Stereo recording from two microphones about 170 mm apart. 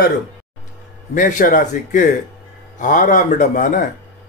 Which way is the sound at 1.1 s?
50° left (ahead or behind).